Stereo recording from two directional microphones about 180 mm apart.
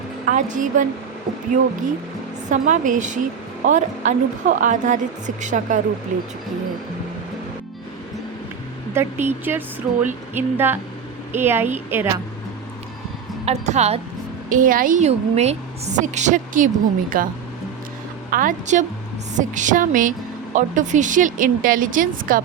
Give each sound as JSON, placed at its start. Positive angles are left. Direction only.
{"t": 0.3, "sound": "a woman's voice", "side_deg": -45}
{"t": 2.5, "sound": "a woman's voice", "side_deg": -45}
{"t": 8.9, "sound": "speech", "side_deg": -15}
{"t": 13.4, "sound": "a woman's voice", "side_deg": -35}
{"t": 14.5, "sound": "a woman's voice", "side_deg": -50}
{"t": 17.1, "sound": "a woman's voice", "side_deg": -55}